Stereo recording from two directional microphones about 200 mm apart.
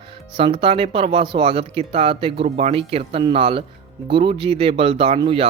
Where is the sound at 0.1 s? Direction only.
25° right (ahead or behind).